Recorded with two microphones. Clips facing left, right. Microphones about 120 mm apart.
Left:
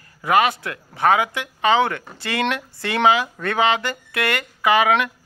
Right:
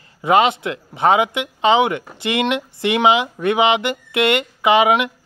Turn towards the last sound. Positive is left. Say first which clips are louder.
# right 3 dB
turn(degrees=-20)  # may be behind; listen again after turning